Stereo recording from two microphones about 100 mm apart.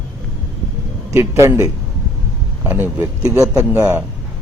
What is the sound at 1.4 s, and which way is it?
Speech, 30° right (ahead or behind).